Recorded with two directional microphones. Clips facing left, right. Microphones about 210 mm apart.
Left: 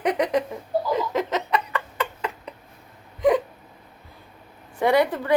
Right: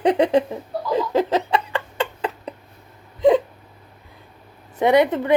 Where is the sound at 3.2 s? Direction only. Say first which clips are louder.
Right 4 dB; 25° right (ahead or behind).